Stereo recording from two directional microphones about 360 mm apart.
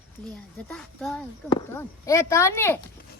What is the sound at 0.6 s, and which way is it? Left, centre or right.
Speech, centre.